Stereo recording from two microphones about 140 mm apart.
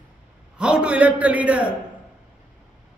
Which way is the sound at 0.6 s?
10° right (ahead or behind).